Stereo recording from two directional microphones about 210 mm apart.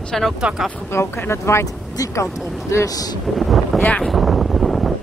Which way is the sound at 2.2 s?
Centre (ahead or behind).